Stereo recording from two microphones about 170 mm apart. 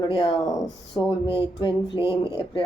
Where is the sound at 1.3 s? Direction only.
30° left (ahead or behind).